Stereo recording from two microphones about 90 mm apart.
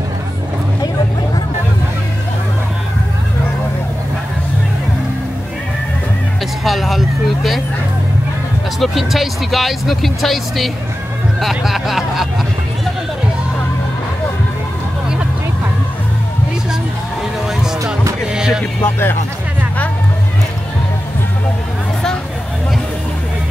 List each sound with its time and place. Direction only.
6.6 s a sound: centre (ahead or behind)
8.7 s speech: centre (ahead or behind)
18.3 s music: 10° right (ahead or behind)
18.8 s speech: 25° left (ahead or behind)